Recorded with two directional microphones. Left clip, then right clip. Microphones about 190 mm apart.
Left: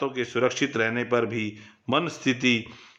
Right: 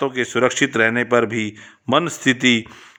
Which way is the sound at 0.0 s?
40° right (ahead or behind).